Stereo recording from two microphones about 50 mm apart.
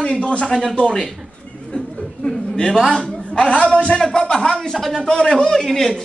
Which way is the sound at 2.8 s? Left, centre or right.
Centre.